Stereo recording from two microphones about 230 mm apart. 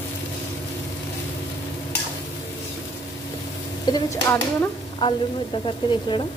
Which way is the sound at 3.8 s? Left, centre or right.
Centre.